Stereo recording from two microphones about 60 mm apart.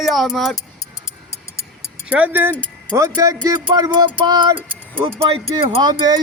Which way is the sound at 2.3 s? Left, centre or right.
Right.